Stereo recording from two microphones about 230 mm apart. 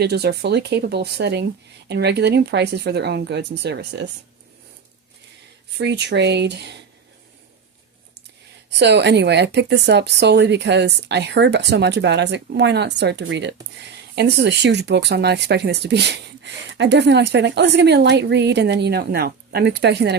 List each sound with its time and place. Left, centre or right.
0.0 s speech: right
5.7 s speech: right
8.7 s speech: right